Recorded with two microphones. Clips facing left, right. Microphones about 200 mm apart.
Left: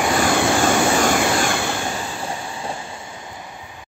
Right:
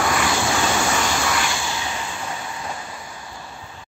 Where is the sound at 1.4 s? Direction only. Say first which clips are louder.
Left 5 dB; 55° left (ahead or behind).